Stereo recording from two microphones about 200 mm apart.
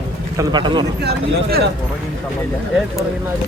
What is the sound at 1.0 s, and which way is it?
Speech, 50° right (ahead or behind).